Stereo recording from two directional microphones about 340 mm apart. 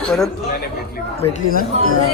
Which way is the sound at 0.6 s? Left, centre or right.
Left.